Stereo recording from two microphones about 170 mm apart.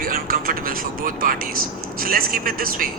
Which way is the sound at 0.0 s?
55° right (ahead or behind).